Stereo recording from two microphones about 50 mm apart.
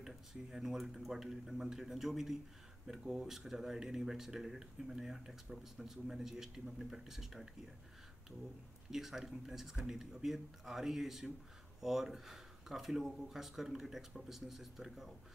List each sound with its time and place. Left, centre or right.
0.0 s speech: centre
8.9 s speech: centre